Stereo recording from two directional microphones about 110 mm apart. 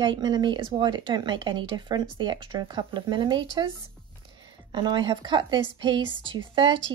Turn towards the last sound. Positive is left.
turn(degrees=-50)  # may be behind; listen again after turning